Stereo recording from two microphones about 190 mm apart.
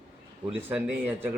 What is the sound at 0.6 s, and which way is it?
Speech, 10° right (ahead or behind).